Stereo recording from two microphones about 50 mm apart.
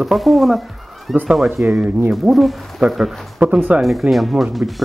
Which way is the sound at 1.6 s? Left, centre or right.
Right.